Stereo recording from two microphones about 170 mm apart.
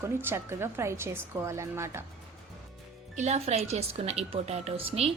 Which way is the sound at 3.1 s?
40° right (ahead or behind).